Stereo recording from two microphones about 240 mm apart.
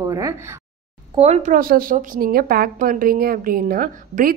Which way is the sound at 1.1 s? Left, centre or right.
Right.